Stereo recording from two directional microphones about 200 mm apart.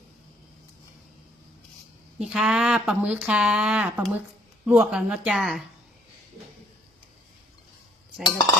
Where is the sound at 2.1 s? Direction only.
5° right (ahead or behind).